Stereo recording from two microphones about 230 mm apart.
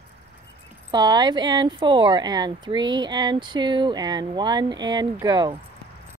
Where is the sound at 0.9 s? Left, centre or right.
Centre.